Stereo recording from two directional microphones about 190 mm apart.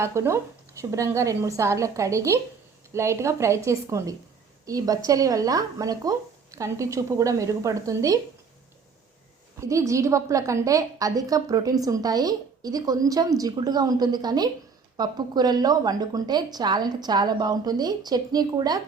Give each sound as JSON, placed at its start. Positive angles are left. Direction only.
{"t": 0.0, "sound": "a woman's voice", "side_deg": -15}
{"t": 9.6, "sound": "a woman's voice", "side_deg": -15}